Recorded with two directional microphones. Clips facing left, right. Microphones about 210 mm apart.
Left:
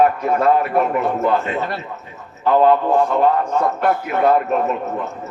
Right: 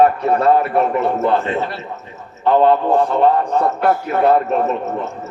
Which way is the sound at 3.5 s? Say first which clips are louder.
Right 2 dB; 35° right (ahead or behind).